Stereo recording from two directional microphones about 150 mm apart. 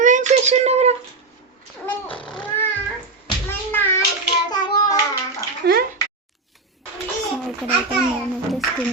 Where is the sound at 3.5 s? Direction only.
15° left (ahead or behind).